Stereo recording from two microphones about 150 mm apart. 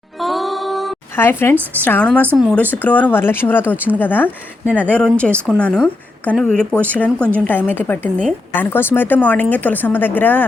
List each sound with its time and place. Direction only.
0.2 s music: centre (ahead or behind)
1.1 s a woman's voice: 15° left (ahead or behind)